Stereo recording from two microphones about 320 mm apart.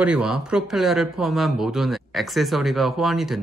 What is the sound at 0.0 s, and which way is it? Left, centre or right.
Speech, centre.